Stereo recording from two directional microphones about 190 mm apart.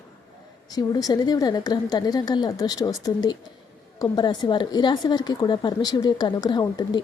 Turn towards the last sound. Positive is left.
turn(degrees=20)  # may be behind; listen again after turning